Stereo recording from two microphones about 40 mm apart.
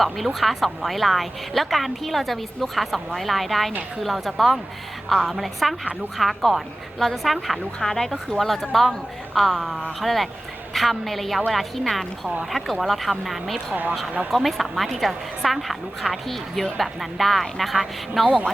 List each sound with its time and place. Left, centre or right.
0.0 s a woman's voice: centre